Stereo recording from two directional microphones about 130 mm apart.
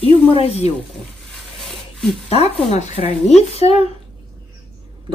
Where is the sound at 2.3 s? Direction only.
55° left (ahead or behind).